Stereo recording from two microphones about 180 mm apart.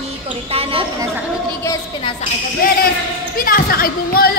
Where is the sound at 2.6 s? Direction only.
50° left (ahead or behind).